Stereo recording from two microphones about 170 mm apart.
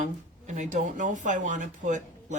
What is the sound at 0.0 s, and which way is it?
Speech, 45° right (ahead or behind).